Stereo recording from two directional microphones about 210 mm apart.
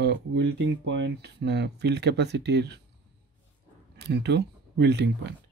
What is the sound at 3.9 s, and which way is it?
Speech, 50° right (ahead or behind).